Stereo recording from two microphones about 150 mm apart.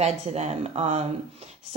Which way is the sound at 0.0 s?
45° right (ahead or behind).